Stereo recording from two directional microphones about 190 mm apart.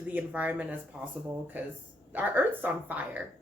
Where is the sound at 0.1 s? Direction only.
10° right (ahead or behind).